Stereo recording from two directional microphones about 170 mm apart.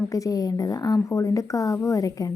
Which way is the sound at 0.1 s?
20° left (ahead or behind).